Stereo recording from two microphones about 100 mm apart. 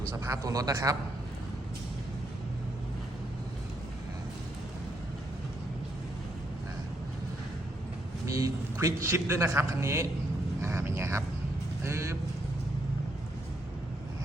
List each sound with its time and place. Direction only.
0.1 s a man's voice: 35° right (ahead or behind)
8.3 s a man's voice: 35° right (ahead or behind)